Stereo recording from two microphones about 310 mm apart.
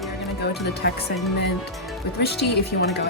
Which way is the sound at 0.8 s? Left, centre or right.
Left.